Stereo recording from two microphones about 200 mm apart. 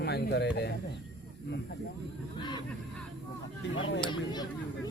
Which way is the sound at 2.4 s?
20° left (ahead or behind).